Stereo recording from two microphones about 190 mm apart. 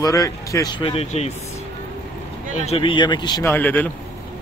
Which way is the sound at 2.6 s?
30° left (ahead or behind).